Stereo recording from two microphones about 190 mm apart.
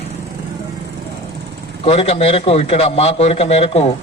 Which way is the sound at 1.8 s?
30° left (ahead or behind).